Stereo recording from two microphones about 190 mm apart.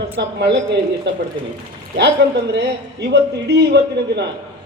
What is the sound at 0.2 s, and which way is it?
A man's voice, 65° right (ahead or behind).